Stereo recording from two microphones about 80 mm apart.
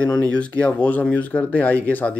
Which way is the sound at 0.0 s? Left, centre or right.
Centre.